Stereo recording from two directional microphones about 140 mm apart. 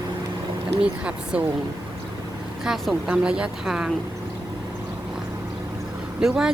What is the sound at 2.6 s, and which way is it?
Speech, centre (ahead or behind).